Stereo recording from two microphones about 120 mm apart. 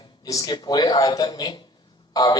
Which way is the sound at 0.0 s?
35° left (ahead or behind).